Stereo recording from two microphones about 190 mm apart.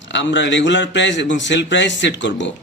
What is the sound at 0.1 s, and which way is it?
A man's voice, 70° left (ahead or behind).